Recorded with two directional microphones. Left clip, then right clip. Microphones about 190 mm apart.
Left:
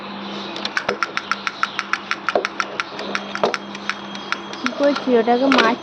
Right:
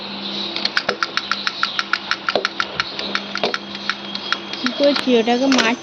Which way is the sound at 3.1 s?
35° left (ahead or behind).